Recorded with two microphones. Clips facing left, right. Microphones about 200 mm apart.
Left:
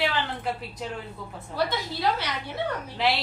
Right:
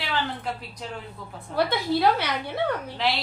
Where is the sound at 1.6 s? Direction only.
60° right (ahead or behind).